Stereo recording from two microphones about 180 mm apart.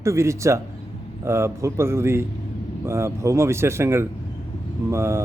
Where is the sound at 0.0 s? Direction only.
15° right (ahead or behind).